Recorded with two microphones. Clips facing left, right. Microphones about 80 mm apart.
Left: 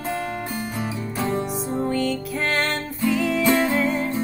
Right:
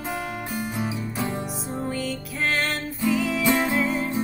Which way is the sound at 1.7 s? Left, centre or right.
Centre.